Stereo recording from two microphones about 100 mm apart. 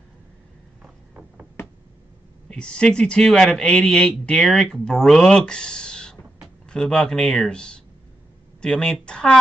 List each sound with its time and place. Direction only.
0.8 s vehicle: 10° right (ahead or behind)
2.5 s speech: 10° left (ahead or behind)